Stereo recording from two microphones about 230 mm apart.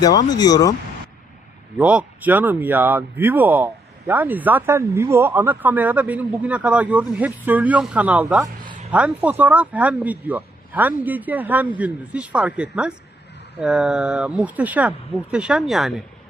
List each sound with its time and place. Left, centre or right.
0.0 s speech: centre
1.8 s speech: centre